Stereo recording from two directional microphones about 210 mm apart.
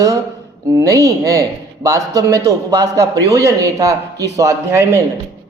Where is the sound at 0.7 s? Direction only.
15° right (ahead or behind).